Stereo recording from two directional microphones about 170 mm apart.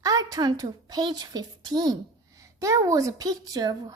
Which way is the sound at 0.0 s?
20° right (ahead or behind).